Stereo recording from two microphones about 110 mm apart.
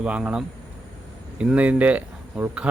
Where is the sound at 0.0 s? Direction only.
10° right (ahead or behind).